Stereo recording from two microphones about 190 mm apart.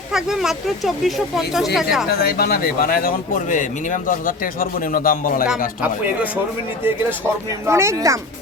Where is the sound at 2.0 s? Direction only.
55° left (ahead or behind).